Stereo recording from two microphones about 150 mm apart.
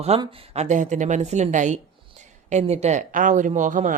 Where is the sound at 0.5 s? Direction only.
55° right (ahead or behind).